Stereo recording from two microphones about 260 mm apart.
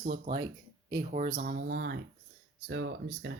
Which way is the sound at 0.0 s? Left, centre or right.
Right.